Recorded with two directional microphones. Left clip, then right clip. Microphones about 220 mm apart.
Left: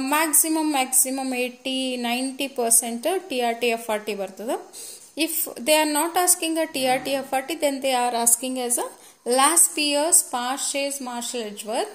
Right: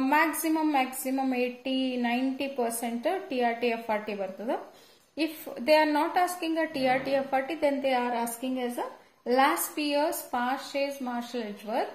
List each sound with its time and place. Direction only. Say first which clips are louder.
0.0 s a woman's voice: left 2 dB; 45° left (ahead or behind)